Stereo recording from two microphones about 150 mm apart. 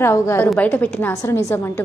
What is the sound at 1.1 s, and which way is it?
Speech, 20° left (ahead or behind).